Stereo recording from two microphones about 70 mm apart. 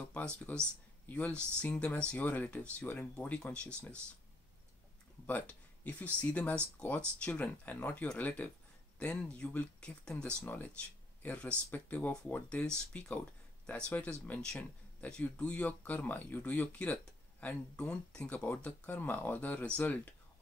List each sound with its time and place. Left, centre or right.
0.4 s speech: left
5.2 s a sound: left
6.2 s speech: left
10.4 s speech: left